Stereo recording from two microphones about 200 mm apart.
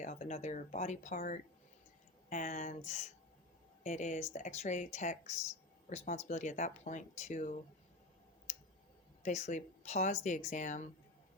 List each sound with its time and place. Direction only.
0.0 s speech: 35° left (ahead or behind)
9.2 s speech: 35° left (ahead or behind)